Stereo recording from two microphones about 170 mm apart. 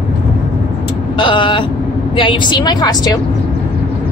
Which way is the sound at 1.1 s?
30° left (ahead or behind).